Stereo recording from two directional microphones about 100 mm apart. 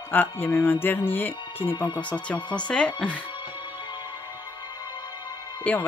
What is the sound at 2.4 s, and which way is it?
Speech, 50° left (ahead or behind).